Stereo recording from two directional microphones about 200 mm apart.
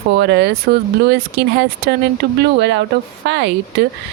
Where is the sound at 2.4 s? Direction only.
60° right (ahead or behind).